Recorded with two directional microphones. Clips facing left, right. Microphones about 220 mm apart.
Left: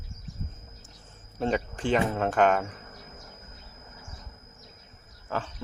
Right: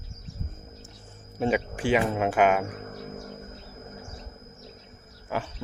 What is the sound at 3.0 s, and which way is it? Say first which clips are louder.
Music: right 10 dB; 50° right (ahead or behind).